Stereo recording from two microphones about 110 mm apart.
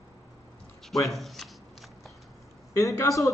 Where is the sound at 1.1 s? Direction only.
Centre (ahead or behind).